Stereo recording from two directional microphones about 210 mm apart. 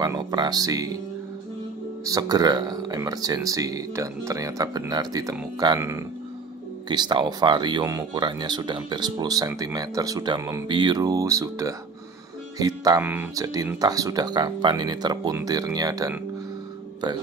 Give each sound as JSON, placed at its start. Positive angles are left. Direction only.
{"t": 0.0, "sound": "speech", "side_deg": -20}
{"t": 2.0, "sound": "speech", "side_deg": -20}